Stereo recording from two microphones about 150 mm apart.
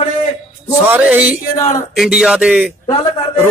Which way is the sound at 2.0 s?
5° right (ahead or behind).